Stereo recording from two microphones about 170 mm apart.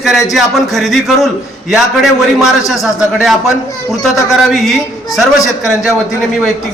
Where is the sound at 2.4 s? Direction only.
Centre (ahead or behind).